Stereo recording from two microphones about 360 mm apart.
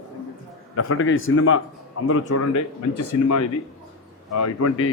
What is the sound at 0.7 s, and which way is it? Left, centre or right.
A man's voice, left.